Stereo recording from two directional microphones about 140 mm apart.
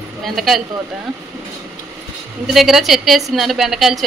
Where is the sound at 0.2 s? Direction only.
Centre (ahead or behind).